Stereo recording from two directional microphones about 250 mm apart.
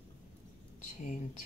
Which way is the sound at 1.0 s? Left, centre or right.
Left.